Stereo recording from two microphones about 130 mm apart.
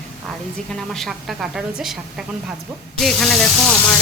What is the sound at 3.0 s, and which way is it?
Speech, centre (ahead or behind).